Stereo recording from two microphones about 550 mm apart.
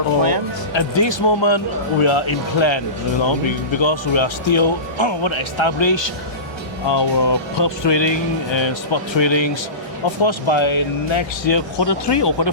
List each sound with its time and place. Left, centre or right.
0.7 s speech: left